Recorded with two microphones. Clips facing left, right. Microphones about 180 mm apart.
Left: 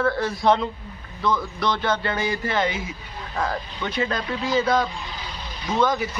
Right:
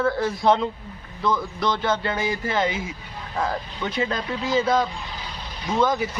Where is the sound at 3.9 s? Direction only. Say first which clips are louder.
Left 1 dB; 25° right (ahead or behind).